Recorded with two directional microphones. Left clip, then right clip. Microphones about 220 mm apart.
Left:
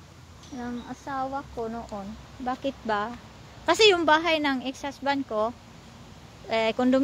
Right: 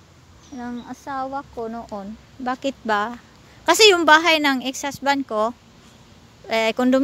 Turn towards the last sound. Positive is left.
turn(degrees=-35)  # may be behind; listen again after turning